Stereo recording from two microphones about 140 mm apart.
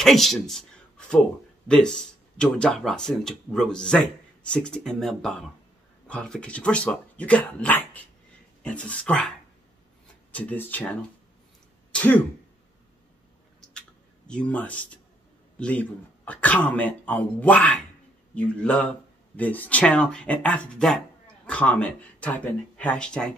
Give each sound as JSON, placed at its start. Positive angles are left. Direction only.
{"t": 0.0, "sound": "speech", "side_deg": 0}
{"t": 10.3, "sound": "speech", "side_deg": 15}
{"t": 11.9, "sound": "throat clearing", "side_deg": 10}
{"t": 13.7, "sound": "a sound", "side_deg": 5}
{"t": 15.6, "sound": "speech", "side_deg": 10}